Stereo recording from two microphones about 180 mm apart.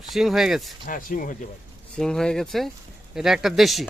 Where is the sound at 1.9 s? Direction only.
5° left (ahead or behind).